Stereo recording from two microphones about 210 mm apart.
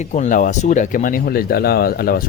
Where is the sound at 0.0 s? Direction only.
35° left (ahead or behind).